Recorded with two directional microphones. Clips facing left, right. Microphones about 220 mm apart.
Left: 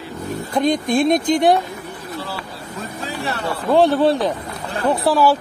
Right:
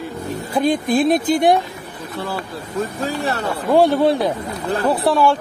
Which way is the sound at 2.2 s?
50° right (ahead or behind).